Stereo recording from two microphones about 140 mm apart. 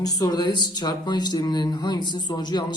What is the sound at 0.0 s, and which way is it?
Speech, 25° left (ahead or behind).